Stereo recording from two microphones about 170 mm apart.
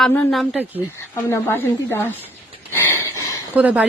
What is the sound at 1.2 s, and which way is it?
Speech, 15° left (ahead or behind).